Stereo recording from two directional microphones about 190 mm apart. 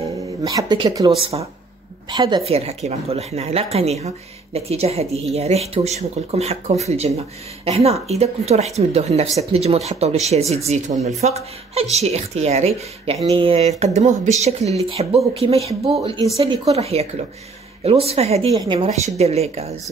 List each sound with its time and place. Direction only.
0.4 s speech: 20° right (ahead or behind)
18.5 s speech: 20° right (ahead or behind)
19.0 s speech: 35° right (ahead or behind)